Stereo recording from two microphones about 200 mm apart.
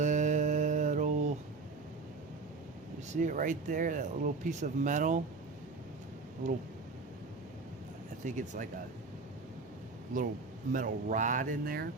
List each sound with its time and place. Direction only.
0.0 s mantra: 35° right (ahead or behind)
3.1 s speech: 40° right (ahead or behind)
8.2 s speech: 40° right (ahead or behind)
10.7 s speech: 40° right (ahead or behind)